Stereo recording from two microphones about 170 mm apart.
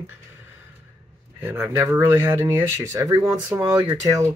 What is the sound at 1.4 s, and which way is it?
Speech, 15° right (ahead or behind).